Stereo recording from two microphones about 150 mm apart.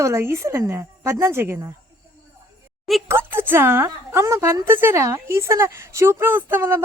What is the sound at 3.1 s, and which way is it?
A woman's voice, 15° right (ahead or behind).